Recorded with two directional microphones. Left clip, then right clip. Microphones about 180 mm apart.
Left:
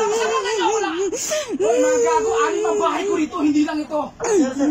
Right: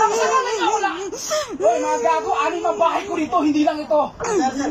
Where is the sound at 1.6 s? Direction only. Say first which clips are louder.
Left 2 dB; 25° left (ahead or behind).